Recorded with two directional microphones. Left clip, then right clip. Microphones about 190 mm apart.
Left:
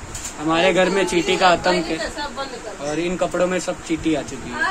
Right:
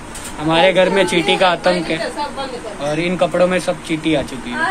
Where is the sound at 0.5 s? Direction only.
10° left (ahead or behind).